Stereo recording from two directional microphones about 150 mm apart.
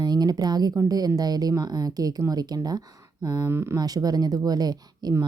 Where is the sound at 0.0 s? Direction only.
25° right (ahead or behind).